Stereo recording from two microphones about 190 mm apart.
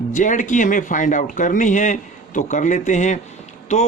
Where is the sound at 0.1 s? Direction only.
40° left (ahead or behind).